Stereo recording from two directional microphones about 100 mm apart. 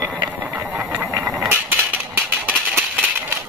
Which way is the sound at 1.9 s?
15° right (ahead or behind).